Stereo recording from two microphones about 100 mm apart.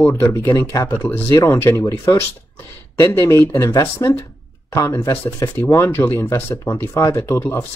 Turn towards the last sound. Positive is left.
turn(degrees=30)  # may be behind; listen again after turning